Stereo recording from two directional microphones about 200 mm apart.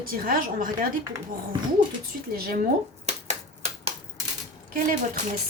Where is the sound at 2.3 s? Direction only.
50° right (ahead or behind).